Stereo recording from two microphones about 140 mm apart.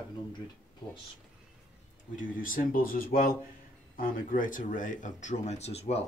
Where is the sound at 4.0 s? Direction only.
75° left (ahead or behind); by 6.0 s 50° left (ahead or behind).